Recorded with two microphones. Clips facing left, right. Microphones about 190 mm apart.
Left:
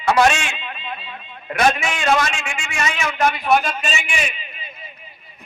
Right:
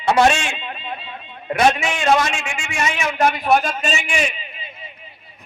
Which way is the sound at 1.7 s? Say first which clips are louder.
Even; 20° right (ahead or behind).